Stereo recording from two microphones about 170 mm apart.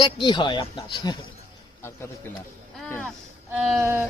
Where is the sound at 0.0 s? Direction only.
30° left (ahead or behind).